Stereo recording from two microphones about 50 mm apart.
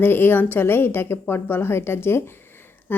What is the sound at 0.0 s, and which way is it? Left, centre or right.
Speech, left.